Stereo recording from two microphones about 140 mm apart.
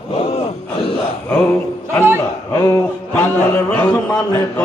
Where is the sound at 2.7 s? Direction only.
20° left (ahead or behind).